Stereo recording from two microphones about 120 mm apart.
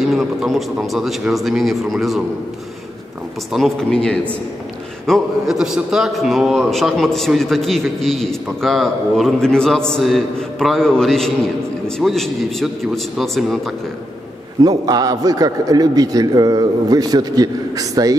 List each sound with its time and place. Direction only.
0.0 s a man's voice: centre (ahead or behind)
3.5 s a man's voice: 5° left (ahead or behind)
14.6 s a man's voice: 30° right (ahead or behind)